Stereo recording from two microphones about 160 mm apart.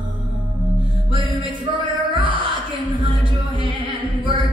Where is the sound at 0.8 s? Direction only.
30° right (ahead or behind).